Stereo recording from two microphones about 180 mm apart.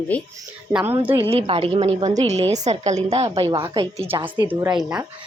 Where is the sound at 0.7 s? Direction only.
5° right (ahead or behind).